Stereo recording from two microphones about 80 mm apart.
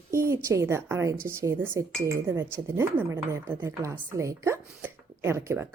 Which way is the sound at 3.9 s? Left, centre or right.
Right.